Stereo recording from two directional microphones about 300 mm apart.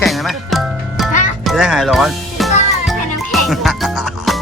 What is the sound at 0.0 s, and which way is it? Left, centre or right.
Music, centre.